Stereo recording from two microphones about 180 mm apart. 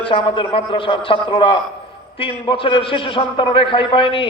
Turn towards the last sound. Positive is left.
turn(degrees=30)  # may be behind; listen again after turning